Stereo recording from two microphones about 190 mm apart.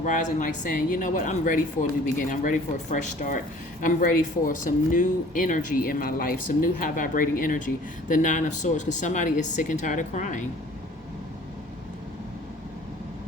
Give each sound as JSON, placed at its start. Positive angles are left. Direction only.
{"t": 0.0, "sound": "speech", "side_deg": 40}